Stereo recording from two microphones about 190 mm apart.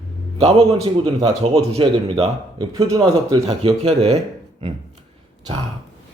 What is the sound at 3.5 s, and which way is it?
Speech, 30° right (ahead or behind).